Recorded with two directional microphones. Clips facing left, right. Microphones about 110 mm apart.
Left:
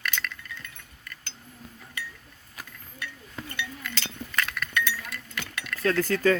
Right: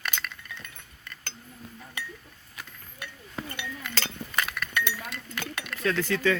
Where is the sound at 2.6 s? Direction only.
40° left (ahead or behind).